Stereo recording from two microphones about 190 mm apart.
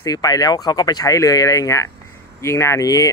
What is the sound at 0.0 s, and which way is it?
Speech, 20° left (ahead or behind).